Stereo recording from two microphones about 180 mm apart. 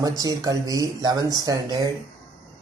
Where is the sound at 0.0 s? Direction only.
20° right (ahead or behind).